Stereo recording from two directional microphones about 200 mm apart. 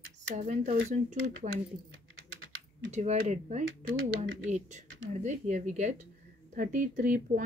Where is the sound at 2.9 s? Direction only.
35° right (ahead or behind).